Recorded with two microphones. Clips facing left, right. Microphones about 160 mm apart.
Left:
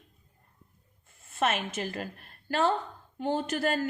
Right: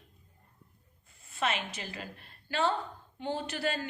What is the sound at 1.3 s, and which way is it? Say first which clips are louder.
A woman's voice: left 4 dB; 50° left (ahead or behind).